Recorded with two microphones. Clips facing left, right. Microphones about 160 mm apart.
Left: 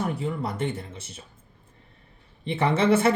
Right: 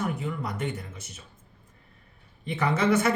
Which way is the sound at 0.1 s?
30° left (ahead or behind).